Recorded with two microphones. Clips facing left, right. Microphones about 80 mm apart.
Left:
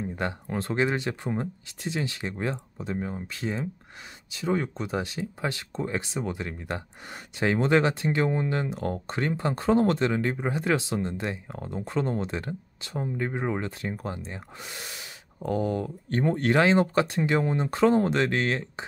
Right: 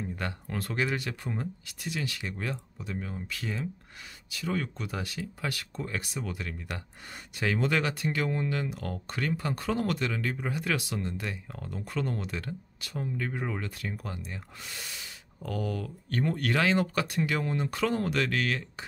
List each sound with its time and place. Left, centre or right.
0.0 s speech: left